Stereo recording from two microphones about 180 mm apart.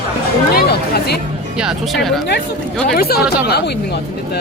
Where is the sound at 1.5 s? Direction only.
Centre (ahead or behind).